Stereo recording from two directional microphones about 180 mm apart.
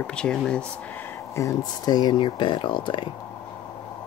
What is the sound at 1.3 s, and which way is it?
Speech, 20° left (ahead or behind).